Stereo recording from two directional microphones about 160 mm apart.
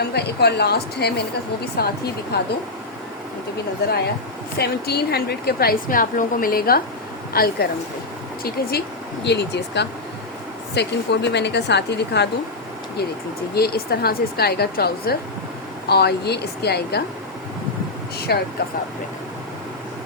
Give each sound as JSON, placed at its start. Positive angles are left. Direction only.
{"t": 0.0, "sound": "speech", "side_deg": 90}
{"t": 1.6, "sound": "speech", "side_deg": 80}
{"t": 2.3, "sound": "speech", "side_deg": 90}
{"t": 3.8, "sound": "speech", "side_deg": 85}
{"t": 9.2, "sound": "speech", "side_deg": 90}
{"t": 13.5, "sound": "speech", "side_deg": 80}
{"t": 15.9, "sound": "speech", "side_deg": 90}
{"t": 18.3, "sound": "speech", "side_deg": 85}